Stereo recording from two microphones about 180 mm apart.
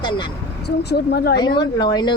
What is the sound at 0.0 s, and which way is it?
Speech, 25° left (ahead or behind).